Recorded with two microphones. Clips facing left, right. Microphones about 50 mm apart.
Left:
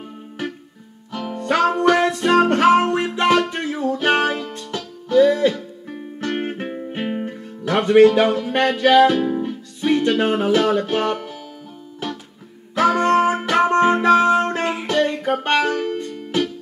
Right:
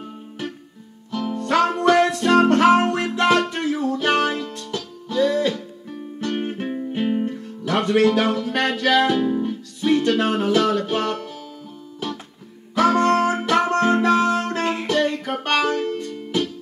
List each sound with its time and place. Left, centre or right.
1.2 s music: left
5.9 s music: left
12.7 s music: left